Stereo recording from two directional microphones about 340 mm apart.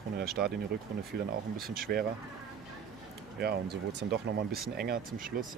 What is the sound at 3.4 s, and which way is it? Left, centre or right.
Speech, right.